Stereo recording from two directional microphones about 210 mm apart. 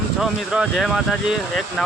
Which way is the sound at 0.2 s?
5° right (ahead or behind).